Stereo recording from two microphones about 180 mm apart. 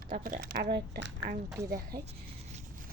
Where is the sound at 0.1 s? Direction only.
50° right (ahead or behind); by 1.3 s 75° right (ahead or behind).